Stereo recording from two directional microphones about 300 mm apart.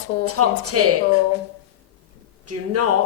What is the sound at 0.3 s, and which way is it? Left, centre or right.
Speech, right.